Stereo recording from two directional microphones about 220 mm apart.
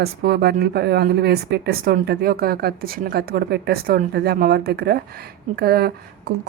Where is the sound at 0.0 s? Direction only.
45° right (ahead or behind).